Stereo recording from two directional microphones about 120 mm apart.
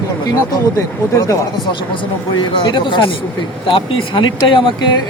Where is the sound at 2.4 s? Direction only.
40° left (ahead or behind).